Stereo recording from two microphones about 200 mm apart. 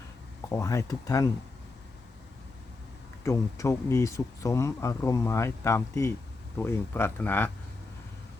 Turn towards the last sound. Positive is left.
turn(degrees=10)  # may be behind; listen again after turning